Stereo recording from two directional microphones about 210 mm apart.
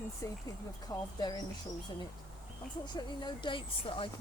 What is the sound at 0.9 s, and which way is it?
Speech, 15° left (ahead or behind).